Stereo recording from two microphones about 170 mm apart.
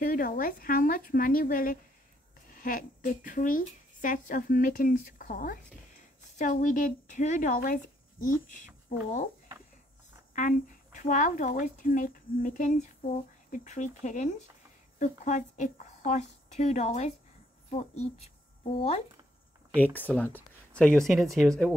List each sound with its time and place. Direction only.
0.0 s a woman's voice: 55° left (ahead or behind)
11.0 s speech: 45° left (ahead or behind)
20.0 s speech: 10° left (ahead or behind)